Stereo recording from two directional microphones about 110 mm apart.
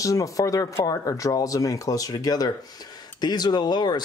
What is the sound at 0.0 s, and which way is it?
Speech, 30° left (ahead or behind).